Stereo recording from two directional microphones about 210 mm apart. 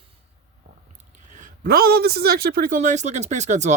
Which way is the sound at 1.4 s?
40° right (ahead or behind).